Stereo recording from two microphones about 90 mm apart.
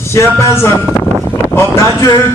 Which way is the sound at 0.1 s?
30° left (ahead or behind).